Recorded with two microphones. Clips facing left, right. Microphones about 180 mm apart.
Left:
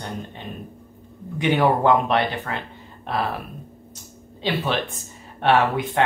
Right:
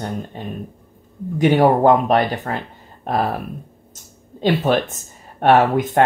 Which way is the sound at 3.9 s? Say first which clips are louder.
Even; 45° right (ahead or behind).